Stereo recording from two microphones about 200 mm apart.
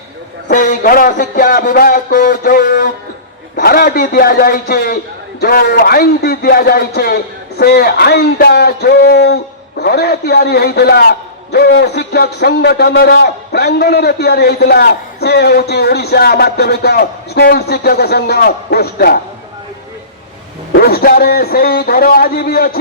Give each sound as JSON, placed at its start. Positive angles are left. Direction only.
{"t": 0.4, "sound": "a man's voice", "side_deg": 40}
{"t": 20.7, "sound": "a man's voice", "side_deg": 50}